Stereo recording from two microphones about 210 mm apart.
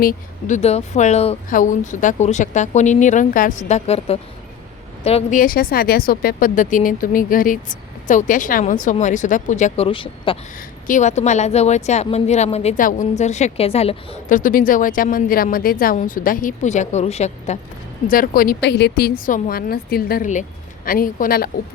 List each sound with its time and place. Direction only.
0.0 s a woman's voice: 40° left (ahead or behind); by 10.3 s 25° left (ahead or behind)
10.8 s a woman's voice: 35° left (ahead or behind)
18.1 s a woman's voice: 40° left (ahead or behind)